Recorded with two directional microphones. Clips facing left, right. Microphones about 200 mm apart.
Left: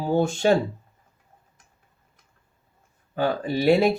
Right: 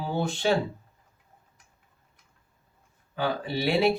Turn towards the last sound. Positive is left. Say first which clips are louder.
# left 6 dB
turn(degrees=45)  # may be behind; listen again after turning